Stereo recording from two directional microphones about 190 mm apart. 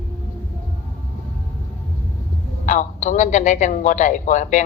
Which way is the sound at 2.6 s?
40° left (ahead or behind).